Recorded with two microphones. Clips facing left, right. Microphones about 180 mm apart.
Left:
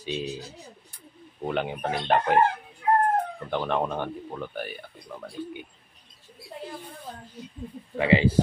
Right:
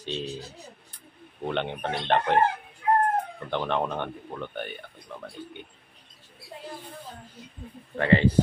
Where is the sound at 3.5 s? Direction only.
Centre (ahead or behind).